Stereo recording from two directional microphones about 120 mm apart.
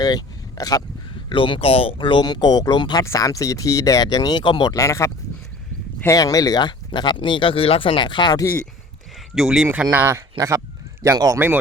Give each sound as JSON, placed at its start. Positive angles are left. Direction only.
{"t": 0.0, "sound": "speech", "side_deg": 35}
{"t": 1.3, "sound": "speech", "side_deg": 45}
{"t": 3.0, "sound": "speech", "side_deg": 25}
{"t": 9.3, "sound": "speech", "side_deg": -5}
{"t": 9.9, "sound": "speech", "side_deg": -20}